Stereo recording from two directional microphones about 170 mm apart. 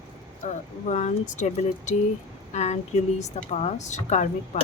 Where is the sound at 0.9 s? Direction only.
45° left (ahead or behind).